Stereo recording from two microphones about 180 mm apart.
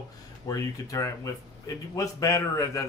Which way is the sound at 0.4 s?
20° left (ahead or behind).